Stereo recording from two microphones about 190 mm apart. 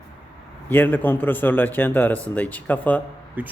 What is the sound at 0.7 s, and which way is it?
Speech, 10° left (ahead or behind).